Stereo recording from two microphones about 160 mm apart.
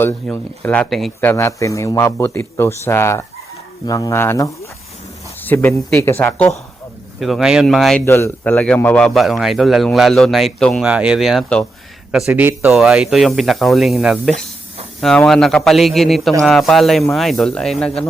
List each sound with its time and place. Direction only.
0.0 s speech: 10° left (ahead or behind)
1.3 s speech: 15° left (ahead or behind)
7.2 s a man's voice: centre (ahead or behind)
8.0 s a man's voice: 15° left (ahead or behind)
12.3 s speech: 15° right (ahead or behind)
12.7 s a man's voice: centre (ahead or behind)